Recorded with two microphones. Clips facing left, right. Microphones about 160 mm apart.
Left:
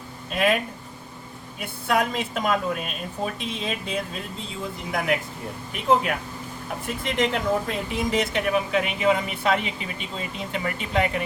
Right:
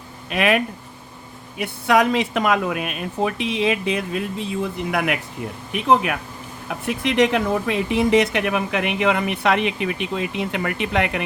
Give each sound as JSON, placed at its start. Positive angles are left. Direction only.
{"t": 0.3, "sound": "speech", "side_deg": -70}